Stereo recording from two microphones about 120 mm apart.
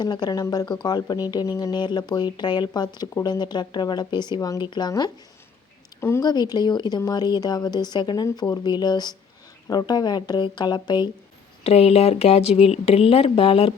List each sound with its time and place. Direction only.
0.0 s a woman's voice: 35° left (ahead or behind)
6.0 s speech: 20° left (ahead or behind)
6.2 s a woman's voice: 35° left (ahead or behind)
11.6 s speech: 60° left (ahead or behind)